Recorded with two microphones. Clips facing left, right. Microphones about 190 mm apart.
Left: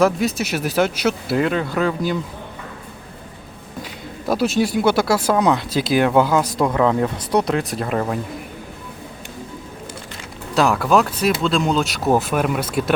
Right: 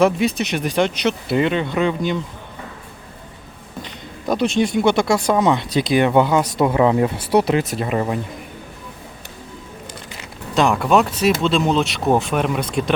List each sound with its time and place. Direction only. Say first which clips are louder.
0.0 s speech: right 1 dB; centre (ahead or behind)
3.8 s speech: even; 5° left (ahead or behind)
10.5 s speech: even; centre (ahead or behind)